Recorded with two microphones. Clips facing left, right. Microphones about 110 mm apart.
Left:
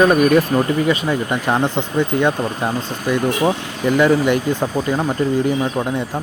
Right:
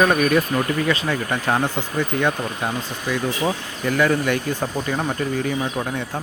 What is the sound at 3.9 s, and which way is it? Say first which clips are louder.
Speech: left 5 dB; 20° left (ahead or behind).